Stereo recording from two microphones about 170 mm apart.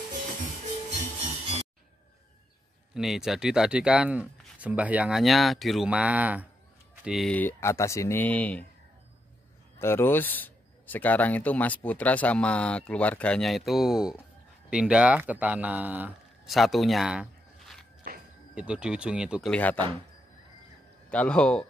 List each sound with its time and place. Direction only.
2.9 s speech: centre (ahead or behind)
7.3 s speech: 15° left (ahead or behind)
9.8 s speech: 15° left (ahead or behind); by 17.7 s 5° right (ahead or behind)
18.1 s a sound: 60° right (ahead or behind)
18.5 s speech: 5° right (ahead or behind)
19.5 s speech: 10° left (ahead or behind)
21.1 s speech: 5° left (ahead or behind)